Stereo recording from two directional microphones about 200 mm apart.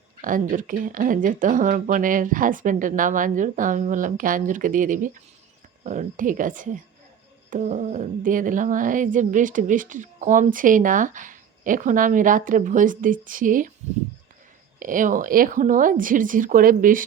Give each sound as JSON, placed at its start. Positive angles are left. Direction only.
{"t": 0.2, "sound": "speech", "side_deg": -40}
{"t": 14.8, "sound": "speech", "side_deg": -40}